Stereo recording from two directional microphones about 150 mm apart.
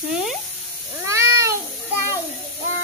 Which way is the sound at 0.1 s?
5° right (ahead or behind).